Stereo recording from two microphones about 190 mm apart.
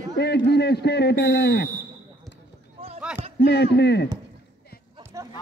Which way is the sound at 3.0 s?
5° right (ahead or behind).